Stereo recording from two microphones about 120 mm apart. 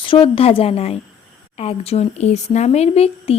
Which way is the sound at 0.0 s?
45° left (ahead or behind).